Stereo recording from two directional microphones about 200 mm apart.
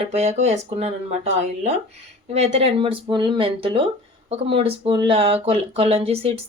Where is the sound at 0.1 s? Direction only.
35° right (ahead or behind).